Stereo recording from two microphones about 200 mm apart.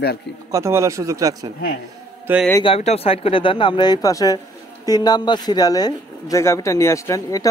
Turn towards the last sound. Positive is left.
turn(degrees=15)  # may be behind; listen again after turning